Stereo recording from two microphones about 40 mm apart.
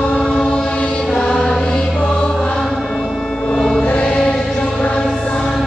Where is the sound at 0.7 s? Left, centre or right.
Left.